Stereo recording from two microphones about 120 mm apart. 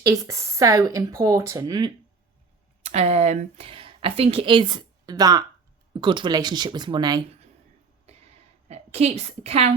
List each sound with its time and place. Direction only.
0.0 s speech: 30° right (ahead or behind)
2.8 s a woman's voice: 60° right (ahead or behind)
3.7 s a woman's voice: 50° right (ahead or behind)
8.6 s a woman's voice: 60° right (ahead or behind)